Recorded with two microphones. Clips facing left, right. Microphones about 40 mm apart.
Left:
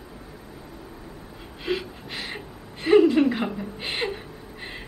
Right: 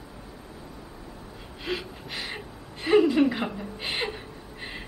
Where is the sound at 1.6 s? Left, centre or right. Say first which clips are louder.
Left 4 dB; centre.